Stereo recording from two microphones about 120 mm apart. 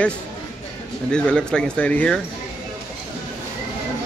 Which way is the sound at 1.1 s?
10° left (ahead or behind).